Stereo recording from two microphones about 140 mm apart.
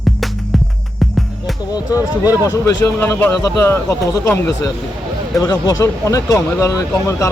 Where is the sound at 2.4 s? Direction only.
25° left (ahead or behind).